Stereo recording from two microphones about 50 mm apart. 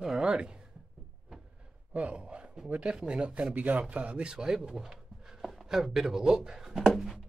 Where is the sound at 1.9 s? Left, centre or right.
Right.